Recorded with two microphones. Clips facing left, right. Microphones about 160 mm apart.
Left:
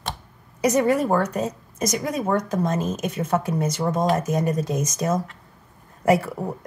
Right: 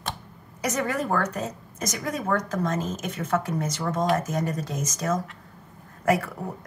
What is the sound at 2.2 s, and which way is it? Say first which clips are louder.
Speech: left 2 dB; 15° left (ahead or behind).